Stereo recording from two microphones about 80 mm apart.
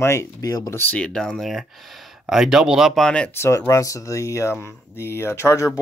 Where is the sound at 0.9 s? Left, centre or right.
Centre.